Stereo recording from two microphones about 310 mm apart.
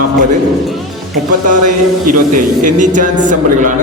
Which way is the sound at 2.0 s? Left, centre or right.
Right.